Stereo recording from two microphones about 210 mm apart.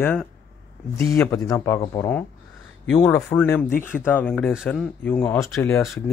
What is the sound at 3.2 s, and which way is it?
Speech, 10° left (ahead or behind).